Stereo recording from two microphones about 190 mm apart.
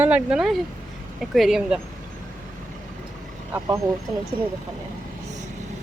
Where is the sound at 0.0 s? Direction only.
5° right (ahead or behind).